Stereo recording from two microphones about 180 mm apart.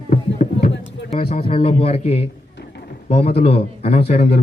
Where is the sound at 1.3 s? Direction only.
35° left (ahead or behind).